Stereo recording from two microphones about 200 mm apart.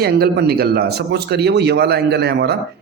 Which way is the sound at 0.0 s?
50° right (ahead or behind).